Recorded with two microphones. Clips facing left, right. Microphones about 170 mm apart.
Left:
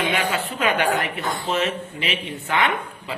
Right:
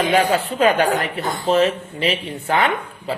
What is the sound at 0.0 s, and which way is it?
Speech, 35° right (ahead or behind).